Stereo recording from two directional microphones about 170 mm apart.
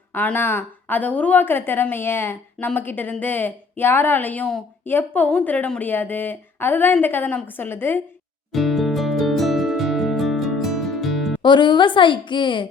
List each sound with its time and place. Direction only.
0.1 s a woman's voice: 10° left (ahead or behind)
8.5 s music: centre (ahead or behind)
11.4 s a woman's voice: 25° left (ahead or behind)